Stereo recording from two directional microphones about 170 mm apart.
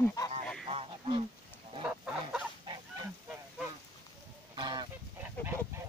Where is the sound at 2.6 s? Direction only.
25° right (ahead or behind).